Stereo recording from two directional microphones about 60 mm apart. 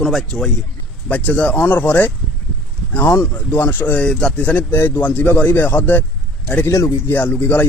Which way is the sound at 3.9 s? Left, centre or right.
Centre.